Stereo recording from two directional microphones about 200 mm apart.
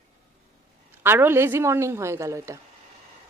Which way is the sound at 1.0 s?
10° right (ahead or behind).